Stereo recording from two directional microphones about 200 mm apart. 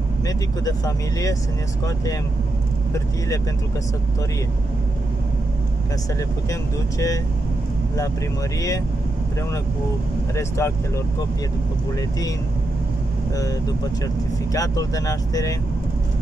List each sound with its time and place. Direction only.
0.3 s speech: 15° left (ahead or behind)
6.1 s speech: 15° left (ahead or behind)
8.5 s speech: 15° left (ahead or behind)
10.6 s speech: 15° left (ahead or behind)
14.5 s speech: 15° left (ahead or behind)